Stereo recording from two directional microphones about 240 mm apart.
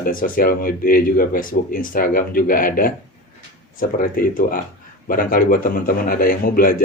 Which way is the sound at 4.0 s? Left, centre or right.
Left.